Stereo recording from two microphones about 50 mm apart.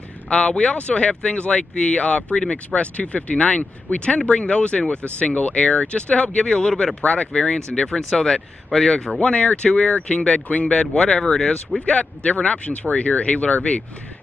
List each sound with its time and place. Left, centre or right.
0.3 s speech: left
8.1 s speech: centre
9.2 s speech: left
11.8 s speech: left